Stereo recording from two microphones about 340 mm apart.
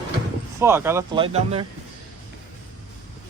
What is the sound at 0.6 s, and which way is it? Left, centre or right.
Speech, centre.